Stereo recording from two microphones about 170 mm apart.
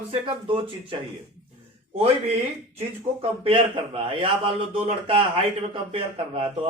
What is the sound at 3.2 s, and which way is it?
A man's voice, 30° right (ahead or behind).